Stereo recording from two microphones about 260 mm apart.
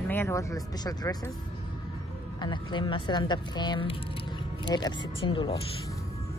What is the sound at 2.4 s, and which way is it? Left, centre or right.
Speech, centre.